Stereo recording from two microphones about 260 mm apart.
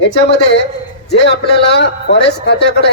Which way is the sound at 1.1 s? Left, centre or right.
Left.